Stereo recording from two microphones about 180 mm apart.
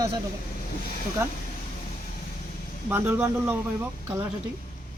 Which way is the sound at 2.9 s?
15° right (ahead or behind).